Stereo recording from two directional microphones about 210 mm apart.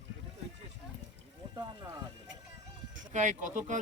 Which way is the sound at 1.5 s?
15° right (ahead or behind).